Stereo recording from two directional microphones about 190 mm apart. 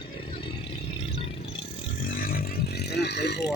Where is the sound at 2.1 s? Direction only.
50° left (ahead or behind).